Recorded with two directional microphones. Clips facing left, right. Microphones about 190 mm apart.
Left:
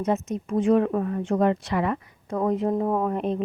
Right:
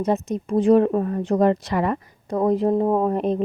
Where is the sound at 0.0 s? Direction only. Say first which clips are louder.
Right 3 dB; 35° right (ahead or behind).